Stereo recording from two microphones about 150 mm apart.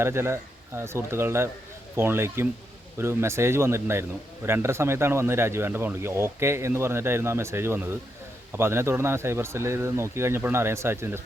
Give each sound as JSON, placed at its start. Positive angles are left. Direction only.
{"t": 0.0, "sound": "speech", "side_deg": -15}